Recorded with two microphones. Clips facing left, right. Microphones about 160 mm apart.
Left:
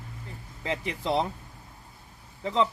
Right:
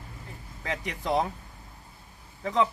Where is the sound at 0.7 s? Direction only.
25° left (ahead or behind).